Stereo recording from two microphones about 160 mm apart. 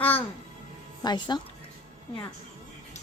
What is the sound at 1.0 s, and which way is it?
Speech, 25° left (ahead or behind).